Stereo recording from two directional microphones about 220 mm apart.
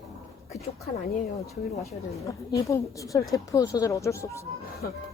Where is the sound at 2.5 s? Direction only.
15° left (ahead or behind).